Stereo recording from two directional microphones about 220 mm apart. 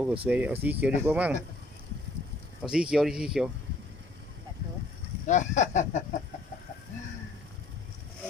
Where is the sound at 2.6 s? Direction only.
5° right (ahead or behind).